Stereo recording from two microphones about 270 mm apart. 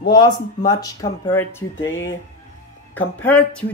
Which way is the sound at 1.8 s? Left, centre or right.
Left.